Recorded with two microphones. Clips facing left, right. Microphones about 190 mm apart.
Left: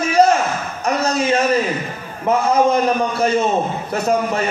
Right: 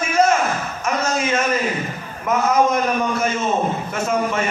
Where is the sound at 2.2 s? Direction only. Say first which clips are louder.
Left 2 dB; 30° left (ahead or behind).